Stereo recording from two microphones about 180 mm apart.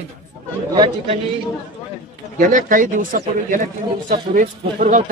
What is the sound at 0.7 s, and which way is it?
Speech, 30° right (ahead or behind).